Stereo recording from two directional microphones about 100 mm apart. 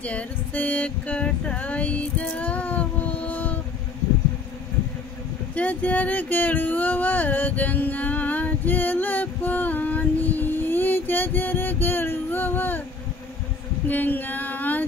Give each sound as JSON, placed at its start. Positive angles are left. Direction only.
{"t": 0.0, "sound": "female singing", "side_deg": 15}
{"t": 5.5, "sound": "speech", "side_deg": 15}
{"t": 13.8, "sound": "female singing", "side_deg": 20}